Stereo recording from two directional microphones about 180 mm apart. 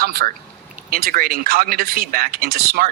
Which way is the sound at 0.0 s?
60° right (ahead or behind).